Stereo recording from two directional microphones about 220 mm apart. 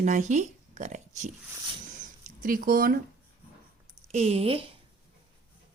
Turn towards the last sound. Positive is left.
turn(degrees=-25)  # may be behind; listen again after turning